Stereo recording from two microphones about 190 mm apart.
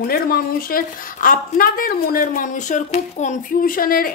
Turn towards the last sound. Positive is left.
turn(degrees=50)  # may be behind; listen again after turning